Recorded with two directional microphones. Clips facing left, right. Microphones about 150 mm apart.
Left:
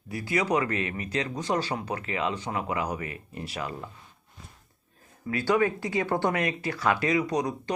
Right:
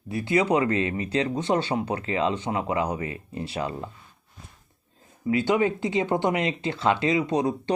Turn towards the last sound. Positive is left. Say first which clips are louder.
# right 4 dB
turn(degrees=-25)  # may be behind; listen again after turning